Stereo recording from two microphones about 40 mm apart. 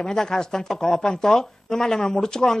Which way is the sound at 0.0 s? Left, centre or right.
Centre.